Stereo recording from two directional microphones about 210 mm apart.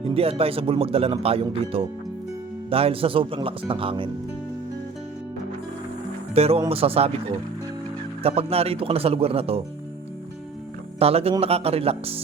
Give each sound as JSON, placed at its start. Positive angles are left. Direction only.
{"t": 0.0, "sound": "speech", "side_deg": -25}
{"t": 6.3, "sound": "speech", "side_deg": -30}
{"t": 8.2, "sound": "speech", "side_deg": -30}
{"t": 11.0, "sound": "speech", "side_deg": -30}